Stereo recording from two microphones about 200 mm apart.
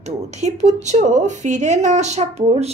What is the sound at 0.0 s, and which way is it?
A woman's voice, 35° right (ahead or behind).